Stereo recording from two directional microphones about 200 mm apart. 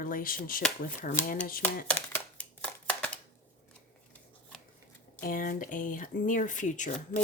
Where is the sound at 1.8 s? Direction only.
5° left (ahead or behind).